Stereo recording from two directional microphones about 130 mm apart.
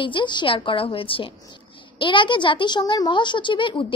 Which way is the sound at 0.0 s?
35° left (ahead or behind).